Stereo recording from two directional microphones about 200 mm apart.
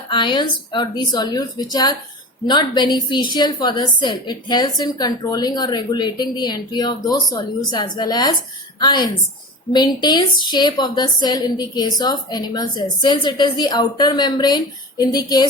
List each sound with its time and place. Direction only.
0.1 s a woman's voice: 25° left (ahead or behind)